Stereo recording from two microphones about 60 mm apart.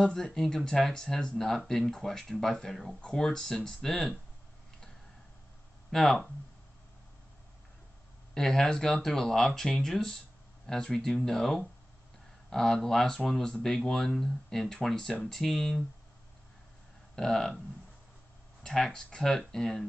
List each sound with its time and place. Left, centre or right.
0.0 s speech: centre
5.9 s speech: centre
8.4 s speech: centre
17.1 s speech: centre
18.6 s speech: centre